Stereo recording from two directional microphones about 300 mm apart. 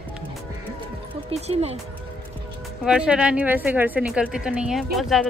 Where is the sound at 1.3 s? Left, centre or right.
Right.